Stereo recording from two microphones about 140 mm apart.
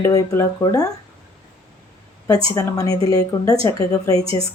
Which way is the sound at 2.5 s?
25° left (ahead or behind).